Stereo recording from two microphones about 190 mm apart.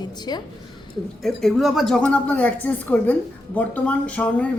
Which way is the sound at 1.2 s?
Centre (ahead or behind).